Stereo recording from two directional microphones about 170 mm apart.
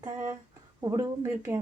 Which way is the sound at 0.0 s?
15° right (ahead or behind).